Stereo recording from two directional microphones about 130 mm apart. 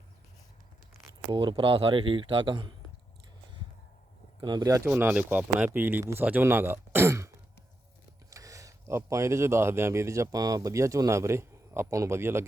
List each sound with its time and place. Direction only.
1.3 s speech: 35° right (ahead or behind)
4.4 s speech: 35° right (ahead or behind)
4.9 s speech: 10° right (ahead or behind)